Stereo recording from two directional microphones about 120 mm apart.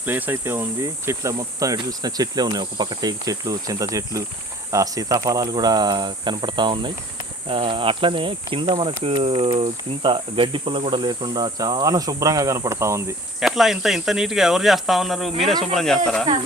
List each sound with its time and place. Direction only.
0.0 s speech: 15° right (ahead or behind)
13.4 s speech: centre (ahead or behind)